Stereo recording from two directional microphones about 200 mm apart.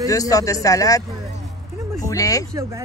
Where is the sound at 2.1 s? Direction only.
15° left (ahead or behind).